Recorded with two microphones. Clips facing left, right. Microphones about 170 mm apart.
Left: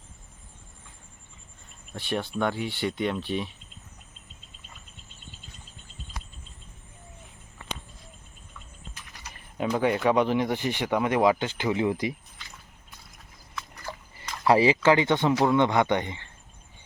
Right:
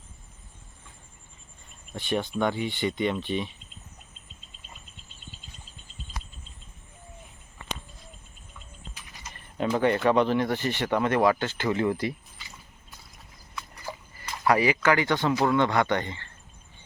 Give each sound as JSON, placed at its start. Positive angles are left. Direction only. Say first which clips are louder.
{"t": 1.9, "sound": "speech", "louder": "right 2 dB", "side_deg": 0}
{"t": 9.6, "sound": "speech", "louder": "right 1 dB", "side_deg": 5}
{"t": 13.9, "sound": "a sound", "louder": "right 2 dB", "side_deg": -10}
{"t": 14.4, "sound": "speech", "louder": "left 3 dB", "side_deg": 25}